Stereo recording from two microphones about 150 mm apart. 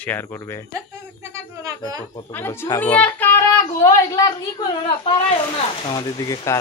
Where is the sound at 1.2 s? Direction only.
20° right (ahead or behind).